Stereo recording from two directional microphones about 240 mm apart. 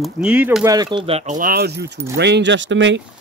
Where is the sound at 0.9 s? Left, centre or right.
Right.